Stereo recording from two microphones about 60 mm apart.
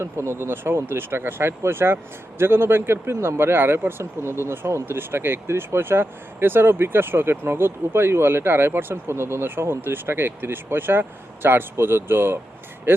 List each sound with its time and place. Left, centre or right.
0.0 s speech: right